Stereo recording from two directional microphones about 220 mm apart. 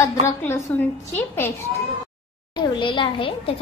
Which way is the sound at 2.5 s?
20° left (ahead or behind).